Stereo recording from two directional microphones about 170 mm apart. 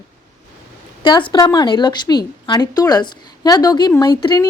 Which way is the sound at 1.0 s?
25° left (ahead or behind).